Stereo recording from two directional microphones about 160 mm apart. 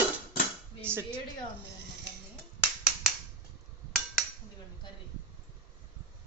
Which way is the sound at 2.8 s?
5° right (ahead or behind).